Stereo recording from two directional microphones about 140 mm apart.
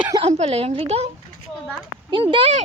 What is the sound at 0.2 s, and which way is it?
Speech, 50° right (ahead or behind).